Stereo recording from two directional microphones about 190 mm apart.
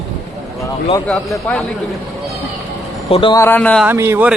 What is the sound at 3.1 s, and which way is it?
Speech, 30° left (ahead or behind).